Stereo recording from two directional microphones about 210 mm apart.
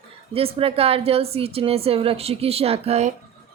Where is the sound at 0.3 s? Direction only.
25° right (ahead or behind).